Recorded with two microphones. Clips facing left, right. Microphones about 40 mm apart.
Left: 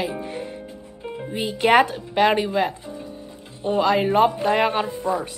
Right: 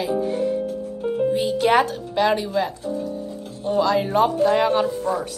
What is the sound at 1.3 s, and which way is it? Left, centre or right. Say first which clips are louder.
Speech: left 3 dB; left.